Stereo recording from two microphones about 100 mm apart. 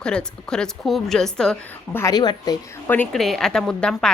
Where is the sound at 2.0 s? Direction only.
40° left (ahead or behind).